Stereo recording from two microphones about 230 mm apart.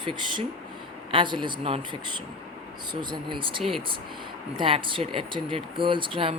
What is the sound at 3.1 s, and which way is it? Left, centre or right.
Speech, right.